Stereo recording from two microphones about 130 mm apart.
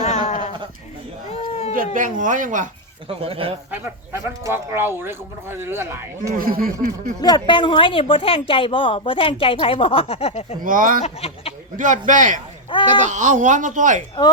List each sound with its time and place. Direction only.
0.0 s sheep: 65° left (ahead or behind)
1.3 s a sound: 55° left (ahead or behind)
1.7 s speech: 90° right
3.1 s speech: 45° right (ahead or behind)
4.1 s speech: 20° right (ahead or behind)
6.3 s speech: 90° right
7.2 s a woman's voice: 30° left (ahead or behind); by 10.4 s 50° left (ahead or behind)
10.6 s speech: 90° right
11.0 s speech: 50° left (ahead or behind)
11.8 s speech: 80° right